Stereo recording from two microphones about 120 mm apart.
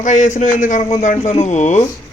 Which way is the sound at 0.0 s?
90° left.